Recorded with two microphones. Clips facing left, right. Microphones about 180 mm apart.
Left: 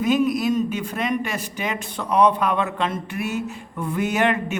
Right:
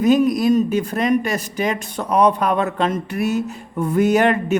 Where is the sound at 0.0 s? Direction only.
40° right (ahead or behind).